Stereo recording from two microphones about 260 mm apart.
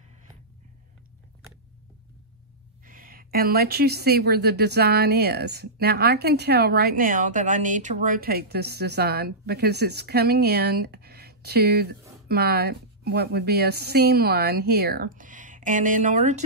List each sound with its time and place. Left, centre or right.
2.8 s speech: right